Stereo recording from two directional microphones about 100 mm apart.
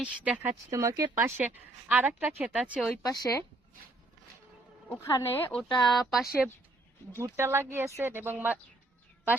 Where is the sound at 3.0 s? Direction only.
35° left (ahead or behind).